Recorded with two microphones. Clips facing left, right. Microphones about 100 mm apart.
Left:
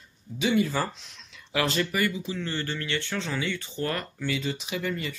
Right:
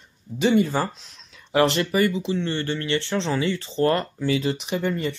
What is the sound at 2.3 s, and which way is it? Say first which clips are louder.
Speech: right 6 dB; 25° right (ahead or behind).